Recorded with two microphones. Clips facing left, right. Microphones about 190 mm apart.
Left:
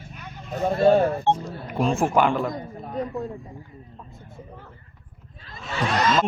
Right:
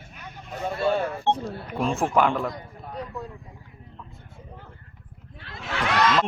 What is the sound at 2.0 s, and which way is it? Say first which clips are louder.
Speech: even; 5° left (ahead or behind).